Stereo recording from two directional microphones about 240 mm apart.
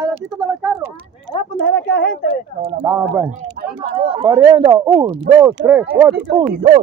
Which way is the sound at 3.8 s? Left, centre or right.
Right.